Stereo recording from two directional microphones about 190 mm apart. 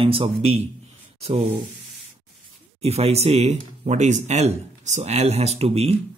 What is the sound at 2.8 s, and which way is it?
Speech, 35° right (ahead or behind).